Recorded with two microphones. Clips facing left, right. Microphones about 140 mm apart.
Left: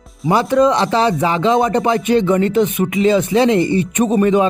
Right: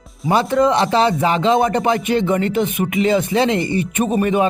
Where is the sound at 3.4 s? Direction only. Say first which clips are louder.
Left 4 dB; 20° left (ahead or behind).